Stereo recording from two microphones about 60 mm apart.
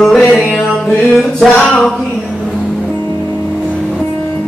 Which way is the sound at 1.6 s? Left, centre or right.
Centre.